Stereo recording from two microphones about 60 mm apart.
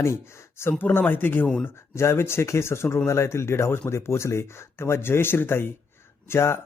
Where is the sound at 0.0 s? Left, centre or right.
Left.